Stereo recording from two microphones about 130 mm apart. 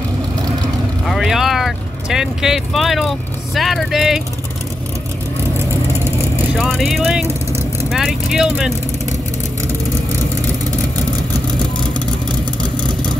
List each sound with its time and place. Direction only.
1.0 s vehicle: centre (ahead or behind)
6.5 s speech: centre (ahead or behind)
12.3 s vehicle: 35° right (ahead or behind)